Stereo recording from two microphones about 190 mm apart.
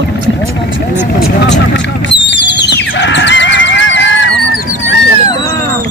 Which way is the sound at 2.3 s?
65° left (ahead or behind).